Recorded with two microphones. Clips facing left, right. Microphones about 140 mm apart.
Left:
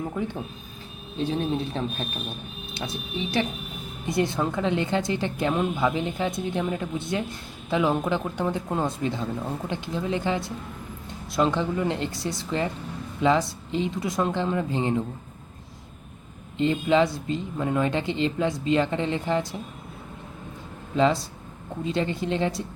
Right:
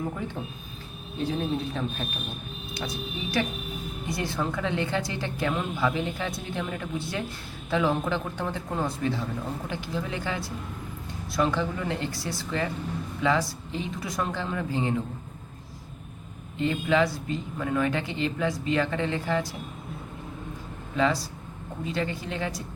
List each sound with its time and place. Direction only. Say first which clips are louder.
1.2 s a woman's voice: left 2 dB; 25° left (ahead or behind)
16.6 s a woman's voice: left 3 dB; 20° left (ahead or behind)
20.9 s a woman's voice: left 4 dB; 25° left (ahead or behind)